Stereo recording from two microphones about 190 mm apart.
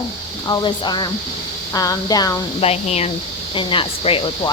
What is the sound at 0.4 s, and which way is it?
Speech, 20° left (ahead or behind).